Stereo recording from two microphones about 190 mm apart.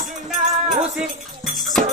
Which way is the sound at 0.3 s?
40° right (ahead or behind).